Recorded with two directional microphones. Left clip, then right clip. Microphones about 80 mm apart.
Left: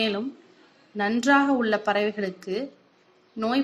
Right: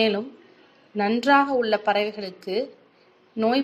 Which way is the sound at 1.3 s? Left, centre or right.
Centre.